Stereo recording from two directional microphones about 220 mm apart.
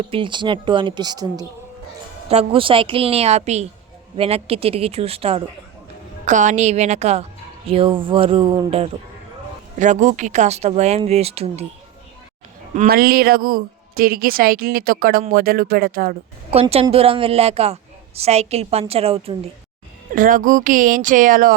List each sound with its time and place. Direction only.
0.1 s a woman's voice: 20° right (ahead or behind)
12.7 s a woman's voice: 40° right (ahead or behind)
16.5 s speech: 25° right (ahead or behind)
20.1 s a woman's voice: 40° right (ahead or behind)